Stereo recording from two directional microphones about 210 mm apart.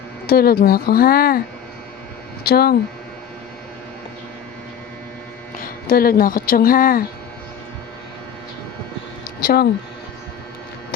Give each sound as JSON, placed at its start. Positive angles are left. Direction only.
{"t": 0.3, "sound": "speech", "side_deg": 45}
{"t": 2.4, "sound": "speech", "side_deg": 45}
{"t": 5.9, "sound": "speech", "side_deg": 45}
{"t": 9.4, "sound": "speech", "side_deg": 45}